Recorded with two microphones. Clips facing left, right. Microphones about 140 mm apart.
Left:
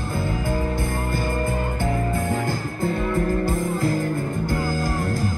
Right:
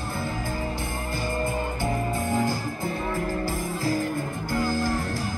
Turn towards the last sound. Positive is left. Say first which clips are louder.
# left 4 dB
turn(degrees=50)  # may be behind; listen again after turning